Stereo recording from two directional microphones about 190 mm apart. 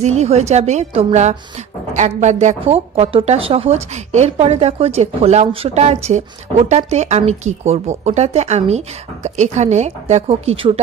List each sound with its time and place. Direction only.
0.0 s a woman's voice: 35° right (ahead or behind)